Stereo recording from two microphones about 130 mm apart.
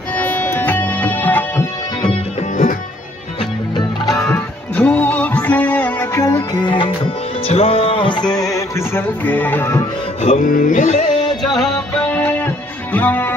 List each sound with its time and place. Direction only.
0.1 s music: 15° left (ahead or behind)
4.3 s music: 10° left (ahead or behind)
6.5 s music: 35° left (ahead or behind)
7.4 s music: 50° left (ahead or behind); by 9.8 s 20° left (ahead or behind)
10.2 s a sound: 75° left (ahead or behind)
11.5 s music: 5° left (ahead or behind)